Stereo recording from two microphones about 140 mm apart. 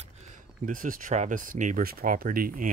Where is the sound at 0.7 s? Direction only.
70° right (ahead or behind).